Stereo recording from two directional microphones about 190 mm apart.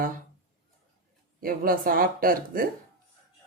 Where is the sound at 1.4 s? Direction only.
50° right (ahead or behind).